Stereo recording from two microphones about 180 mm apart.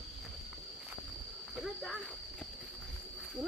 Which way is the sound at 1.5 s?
Centre (ahead or behind).